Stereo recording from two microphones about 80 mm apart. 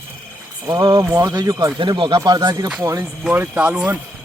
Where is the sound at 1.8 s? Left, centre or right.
Right.